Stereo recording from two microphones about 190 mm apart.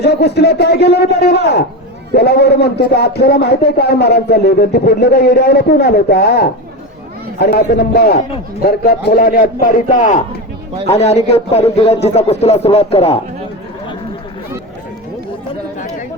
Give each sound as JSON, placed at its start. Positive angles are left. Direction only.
{"t": 0.0, "sound": "a man's voice", "side_deg": 60}